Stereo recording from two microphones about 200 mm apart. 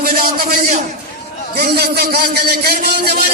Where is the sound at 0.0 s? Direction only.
45° right (ahead or behind).